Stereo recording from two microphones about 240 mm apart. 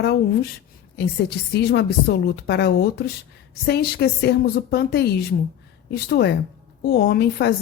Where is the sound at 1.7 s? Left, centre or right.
Left.